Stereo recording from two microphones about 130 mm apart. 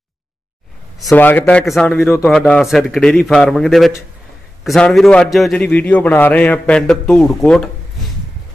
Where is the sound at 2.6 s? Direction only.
Centre (ahead or behind).